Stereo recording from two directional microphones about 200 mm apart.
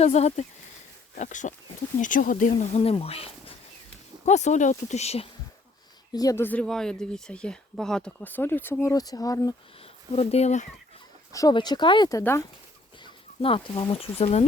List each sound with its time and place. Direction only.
0.0 s speech: 35° left (ahead or behind)
6.1 s speech: 15° left (ahead or behind)
9.8 s speech: 30° left (ahead or behind)
11.3 s speech: 15° left (ahead or behind)
13.0 s speech: 25° left (ahead or behind)